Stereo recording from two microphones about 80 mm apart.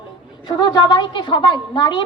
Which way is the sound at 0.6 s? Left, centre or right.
Left.